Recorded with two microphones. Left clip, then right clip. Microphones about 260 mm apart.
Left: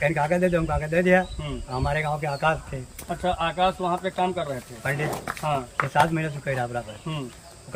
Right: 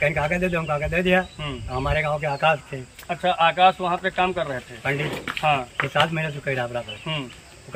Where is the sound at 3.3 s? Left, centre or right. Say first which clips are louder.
Right 8 dB; right.